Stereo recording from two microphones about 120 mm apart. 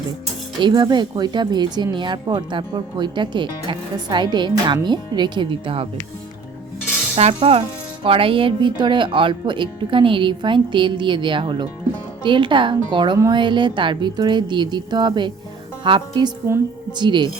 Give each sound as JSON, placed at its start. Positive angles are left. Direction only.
{"t": 0.6, "sound": "speech", "side_deg": -40}
{"t": 7.2, "sound": "speech", "side_deg": -55}